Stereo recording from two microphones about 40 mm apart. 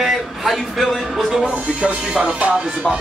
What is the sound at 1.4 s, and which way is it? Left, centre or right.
Music, right.